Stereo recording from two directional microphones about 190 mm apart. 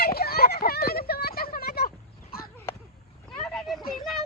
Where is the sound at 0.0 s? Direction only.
55° left (ahead or behind).